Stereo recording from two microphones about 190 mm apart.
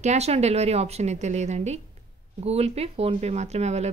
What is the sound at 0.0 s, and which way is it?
A woman's voice, 35° right (ahead or behind).